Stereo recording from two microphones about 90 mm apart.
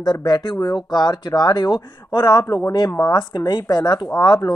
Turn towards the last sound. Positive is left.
turn(degrees=50)  # may be behind; listen again after turning